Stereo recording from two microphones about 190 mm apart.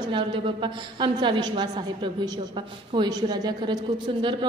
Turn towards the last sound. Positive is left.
turn(degrees=-20)  # may be behind; listen again after turning